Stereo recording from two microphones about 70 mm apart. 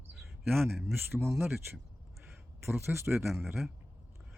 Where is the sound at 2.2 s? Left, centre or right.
Right.